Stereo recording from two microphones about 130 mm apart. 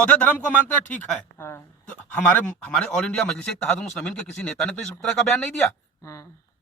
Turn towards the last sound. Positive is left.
turn(degrees=25)  # may be behind; listen again after turning